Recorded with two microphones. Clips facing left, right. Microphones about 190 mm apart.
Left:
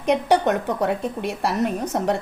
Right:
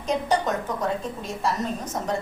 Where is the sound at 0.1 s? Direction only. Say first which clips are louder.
Left 5 dB; 65° left (ahead or behind).